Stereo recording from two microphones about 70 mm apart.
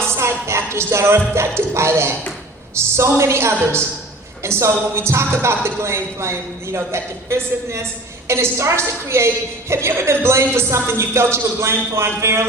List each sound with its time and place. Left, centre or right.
0.2 s a woman's voice: right